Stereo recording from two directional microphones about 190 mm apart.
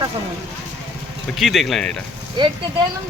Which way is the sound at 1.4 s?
Centre (ahead or behind).